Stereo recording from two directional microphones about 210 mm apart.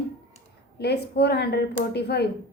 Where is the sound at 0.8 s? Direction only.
50° left (ahead or behind).